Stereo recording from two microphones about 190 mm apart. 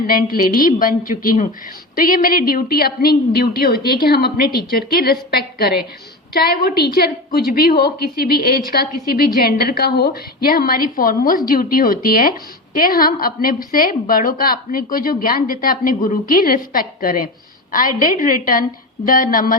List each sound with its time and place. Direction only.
0.1 s a woman's voice: 50° left (ahead or behind)